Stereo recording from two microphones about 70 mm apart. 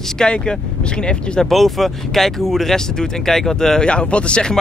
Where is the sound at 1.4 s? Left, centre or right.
Centre.